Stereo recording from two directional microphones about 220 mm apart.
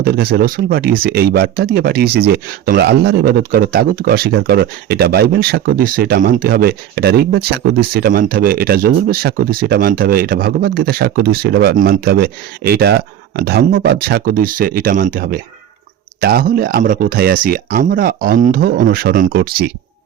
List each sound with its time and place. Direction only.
0.0 s speech: 45° right (ahead or behind)